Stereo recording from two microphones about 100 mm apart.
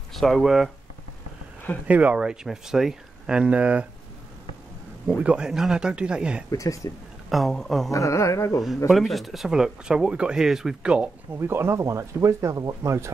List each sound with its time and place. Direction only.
0.1 s speech: centre (ahead or behind)
1.9 s speech: 15° right (ahead or behind)
5.0 s speech: 10° right (ahead or behind)
6.5 s speech: 35° left (ahead or behind)
7.2 s speech: centre (ahead or behind)
7.9 s speech: 30° left (ahead or behind)
8.8 s speech: centre (ahead or behind)
11.3 s speech: 25° right (ahead or behind)